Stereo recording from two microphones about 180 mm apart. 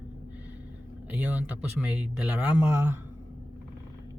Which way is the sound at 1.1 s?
5° right (ahead or behind).